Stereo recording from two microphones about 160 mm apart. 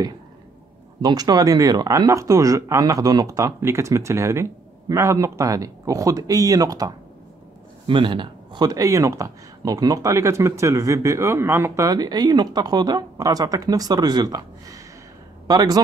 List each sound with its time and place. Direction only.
1.0 s speech: 25° right (ahead or behind)